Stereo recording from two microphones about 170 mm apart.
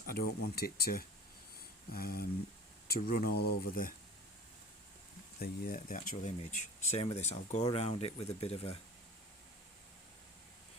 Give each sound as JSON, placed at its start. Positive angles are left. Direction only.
{"t": 0.0, "sound": "speech", "side_deg": 60}
{"t": 5.4, "sound": "speech", "side_deg": 55}